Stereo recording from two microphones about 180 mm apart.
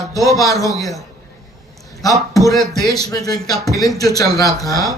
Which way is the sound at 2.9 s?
20° left (ahead or behind).